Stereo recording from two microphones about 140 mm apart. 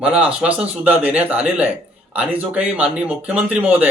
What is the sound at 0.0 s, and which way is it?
Speech, 5° right (ahead or behind).